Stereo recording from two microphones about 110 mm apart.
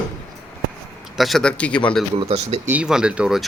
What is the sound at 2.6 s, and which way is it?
Speech, 10° right (ahead or behind).